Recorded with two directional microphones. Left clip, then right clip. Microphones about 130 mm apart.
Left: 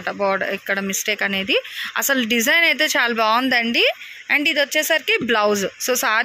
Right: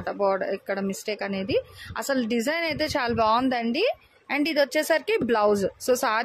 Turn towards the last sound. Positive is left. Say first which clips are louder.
# left 4 dB
turn(degrees=-10)  # may be behind; listen again after turning